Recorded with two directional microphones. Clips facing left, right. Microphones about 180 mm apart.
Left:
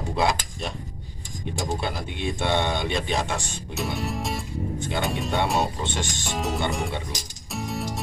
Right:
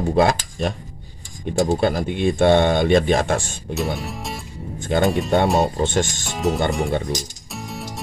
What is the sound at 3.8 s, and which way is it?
Music, centre (ahead or behind).